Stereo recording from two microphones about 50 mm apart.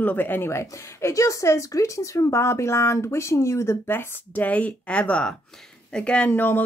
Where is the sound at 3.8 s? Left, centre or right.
Left.